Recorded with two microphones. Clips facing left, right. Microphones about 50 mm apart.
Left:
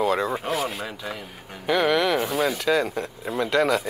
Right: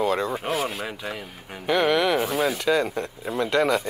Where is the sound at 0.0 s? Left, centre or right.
Centre.